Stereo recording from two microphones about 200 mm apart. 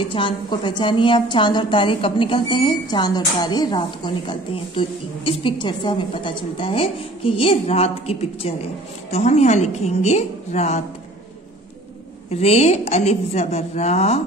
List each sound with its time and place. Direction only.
0.0 s a woman's voice: 25° left (ahead or behind)
12.3 s a woman's voice: 30° left (ahead or behind)